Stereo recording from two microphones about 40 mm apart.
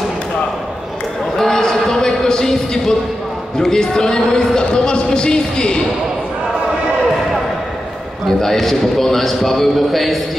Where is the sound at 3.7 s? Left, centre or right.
Centre.